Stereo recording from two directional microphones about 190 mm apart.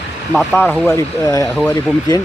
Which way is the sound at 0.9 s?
15° left (ahead or behind).